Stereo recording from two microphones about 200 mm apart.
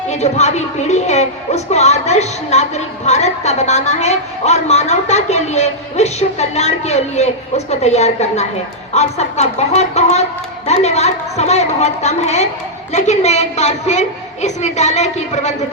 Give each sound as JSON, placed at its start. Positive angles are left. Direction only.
{"t": 0.1, "sound": "a woman's voice", "side_deg": 35}